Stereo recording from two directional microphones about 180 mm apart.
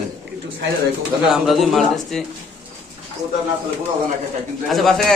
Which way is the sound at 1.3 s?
Centre (ahead or behind).